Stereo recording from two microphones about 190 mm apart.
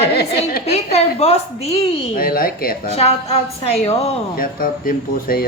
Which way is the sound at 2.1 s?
50° left (ahead or behind).